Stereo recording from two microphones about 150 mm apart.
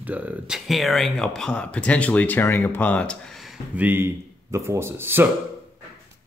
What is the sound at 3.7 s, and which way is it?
Speech, 15° right (ahead or behind).